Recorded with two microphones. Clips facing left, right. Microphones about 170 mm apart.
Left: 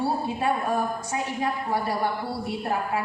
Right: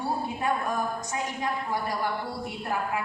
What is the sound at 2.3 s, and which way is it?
Speech, 30° left (ahead or behind).